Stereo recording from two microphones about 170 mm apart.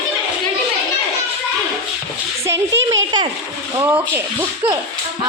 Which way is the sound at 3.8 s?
10° right (ahead or behind).